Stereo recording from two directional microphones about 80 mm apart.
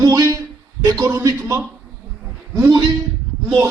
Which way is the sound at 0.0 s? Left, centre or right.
Right.